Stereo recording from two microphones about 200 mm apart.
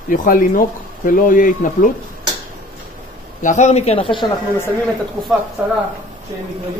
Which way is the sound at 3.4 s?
35° left (ahead or behind).